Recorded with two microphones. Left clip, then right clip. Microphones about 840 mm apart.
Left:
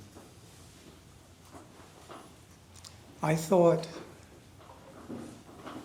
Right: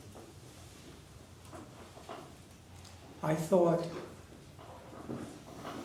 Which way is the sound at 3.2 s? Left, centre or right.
Left.